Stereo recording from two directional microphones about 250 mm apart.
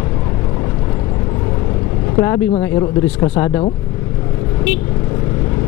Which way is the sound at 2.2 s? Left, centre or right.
Centre.